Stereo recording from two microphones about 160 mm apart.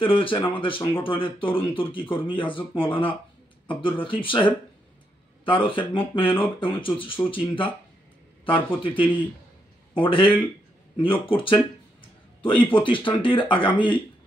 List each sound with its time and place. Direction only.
0.0 s speech: 35° left (ahead or behind)